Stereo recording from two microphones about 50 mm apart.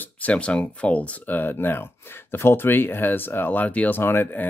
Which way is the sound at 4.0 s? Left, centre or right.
Left.